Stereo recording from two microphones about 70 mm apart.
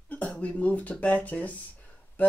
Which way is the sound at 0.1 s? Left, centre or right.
Centre.